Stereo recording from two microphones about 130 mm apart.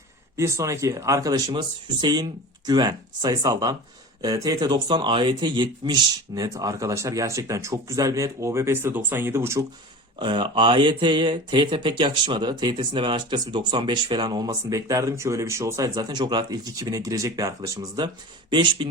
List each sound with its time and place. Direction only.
0.3 s speech: 20° right (ahead or behind)
10.2 s speech: 40° right (ahead or behind)